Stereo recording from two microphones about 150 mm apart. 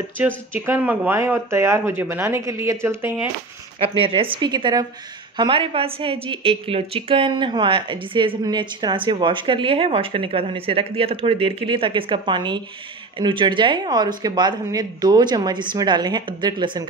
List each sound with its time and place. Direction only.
0.5 s speech: 15° right (ahead or behind)
3.8 s a woman's voice: 35° right (ahead or behind)